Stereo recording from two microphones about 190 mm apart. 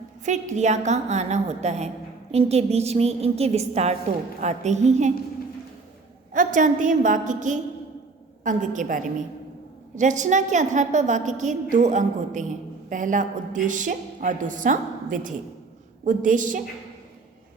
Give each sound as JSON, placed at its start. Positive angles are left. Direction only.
{"t": 0.3, "sound": "a woman's voice", "side_deg": -40}
{"t": 6.3, "sound": "a woman's voice", "side_deg": -45}